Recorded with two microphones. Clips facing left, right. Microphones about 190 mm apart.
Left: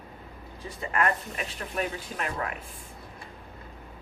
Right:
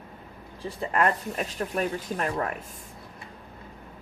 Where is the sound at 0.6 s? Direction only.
35° right (ahead or behind).